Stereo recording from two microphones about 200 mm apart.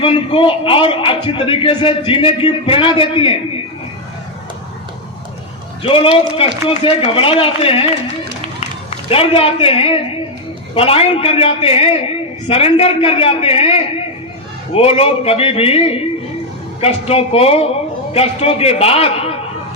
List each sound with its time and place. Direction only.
0.0 s a man's voice: 25° left (ahead or behind)
5.8 s a man's voice: 25° left (ahead or behind)
8.9 s a man's voice: 30° left (ahead or behind)